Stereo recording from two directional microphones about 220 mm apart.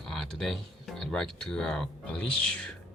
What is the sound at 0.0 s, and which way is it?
Speech, centre (ahead or behind).